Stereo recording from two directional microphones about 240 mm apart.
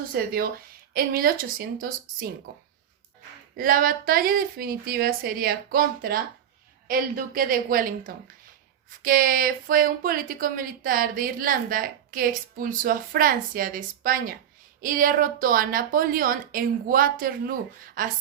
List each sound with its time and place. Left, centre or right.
0.1 s a woman's voice: right
3.6 s a woman's voice: right